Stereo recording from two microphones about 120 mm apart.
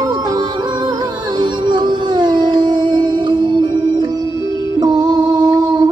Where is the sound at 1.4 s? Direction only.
40° right (ahead or behind).